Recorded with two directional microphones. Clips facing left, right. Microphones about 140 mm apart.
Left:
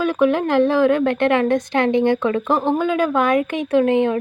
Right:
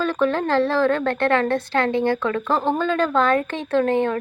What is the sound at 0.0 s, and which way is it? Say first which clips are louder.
A woman's voice: left 3 dB; 10° left (ahead or behind).